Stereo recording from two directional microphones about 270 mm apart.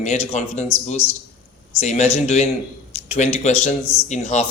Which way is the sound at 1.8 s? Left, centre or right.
Left.